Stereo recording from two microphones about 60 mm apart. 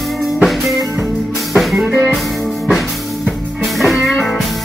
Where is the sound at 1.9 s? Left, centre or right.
Right.